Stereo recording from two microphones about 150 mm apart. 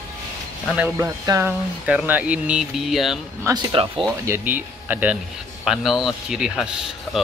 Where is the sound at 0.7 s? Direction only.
10° right (ahead or behind).